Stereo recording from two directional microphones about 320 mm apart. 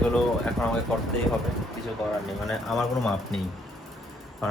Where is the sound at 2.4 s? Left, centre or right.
Centre.